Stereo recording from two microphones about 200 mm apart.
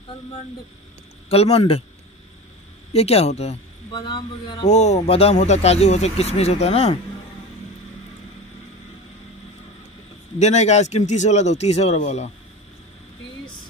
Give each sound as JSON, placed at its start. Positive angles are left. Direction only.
{"t": 1.3, "sound": "speech", "side_deg": 30}
{"t": 2.9, "sound": "a man's voice", "side_deg": 30}
{"t": 4.6, "sound": "speech", "side_deg": 35}
{"t": 10.4, "sound": "speech", "side_deg": 35}